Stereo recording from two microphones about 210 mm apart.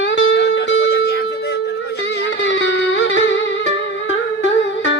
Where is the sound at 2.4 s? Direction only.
60° left (ahead or behind).